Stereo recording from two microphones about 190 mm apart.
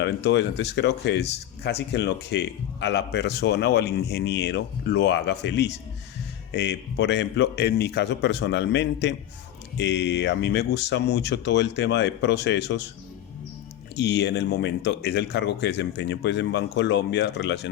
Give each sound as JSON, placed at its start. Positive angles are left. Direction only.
{"t": 0.0, "sound": "speech", "side_deg": 65}
{"t": 13.9, "sound": "speech", "side_deg": 65}